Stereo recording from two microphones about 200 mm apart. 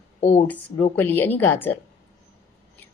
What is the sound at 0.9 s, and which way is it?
Speech, 10° left (ahead or behind).